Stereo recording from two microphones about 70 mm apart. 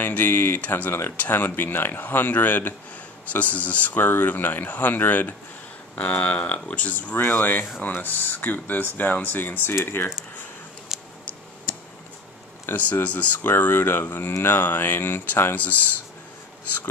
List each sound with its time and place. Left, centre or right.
0.0 s speech: left
10.9 s a sound: centre
12.6 s speech: left